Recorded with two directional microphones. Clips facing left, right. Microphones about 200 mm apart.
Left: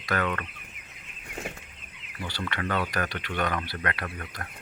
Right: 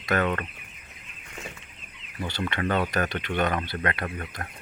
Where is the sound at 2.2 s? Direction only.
20° right (ahead or behind).